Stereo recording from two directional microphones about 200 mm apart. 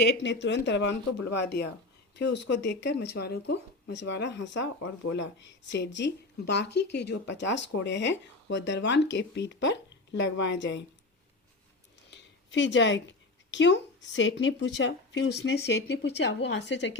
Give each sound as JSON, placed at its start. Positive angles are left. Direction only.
{"t": 0.0, "sound": "speech", "side_deg": 60}
{"t": 12.1, "sound": "speech", "side_deg": 65}